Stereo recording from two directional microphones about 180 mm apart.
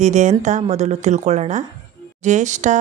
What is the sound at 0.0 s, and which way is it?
Speech, 40° right (ahead or behind).